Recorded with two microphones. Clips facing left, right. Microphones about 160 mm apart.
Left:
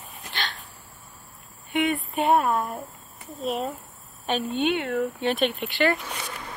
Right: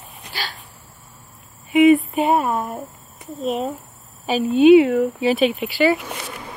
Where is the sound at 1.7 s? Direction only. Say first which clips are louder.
Right 12 dB; centre (ahead or behind).